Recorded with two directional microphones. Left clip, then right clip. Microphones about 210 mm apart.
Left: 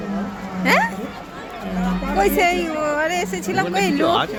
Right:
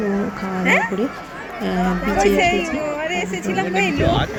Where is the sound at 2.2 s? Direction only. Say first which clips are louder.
Even; 20° left (ahead or behind).